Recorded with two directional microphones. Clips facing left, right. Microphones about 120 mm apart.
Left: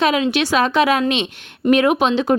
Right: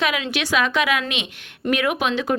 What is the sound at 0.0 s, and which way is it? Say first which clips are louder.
A woman's voice: left 7 dB; 30° left (ahead or behind).